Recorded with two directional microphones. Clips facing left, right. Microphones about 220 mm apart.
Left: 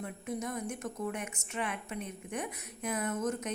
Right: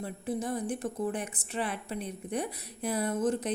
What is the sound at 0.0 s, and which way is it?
A woman's voice, 30° right (ahead or behind).